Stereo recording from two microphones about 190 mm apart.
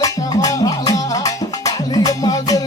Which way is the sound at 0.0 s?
20° left (ahead or behind).